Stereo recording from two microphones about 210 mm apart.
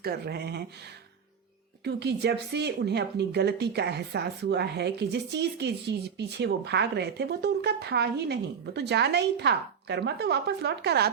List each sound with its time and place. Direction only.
0.0 s a woman's voice: 50° right (ahead or behind)
1.8 s a woman's voice: 50° right (ahead or behind)